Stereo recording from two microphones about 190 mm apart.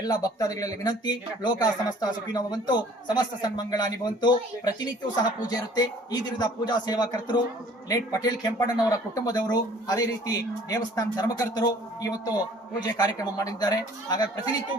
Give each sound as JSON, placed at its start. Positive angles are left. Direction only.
{"t": 0.0, "sound": "speech", "side_deg": 20}